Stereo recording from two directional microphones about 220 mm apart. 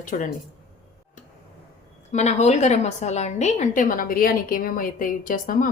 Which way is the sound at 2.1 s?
30° left (ahead or behind).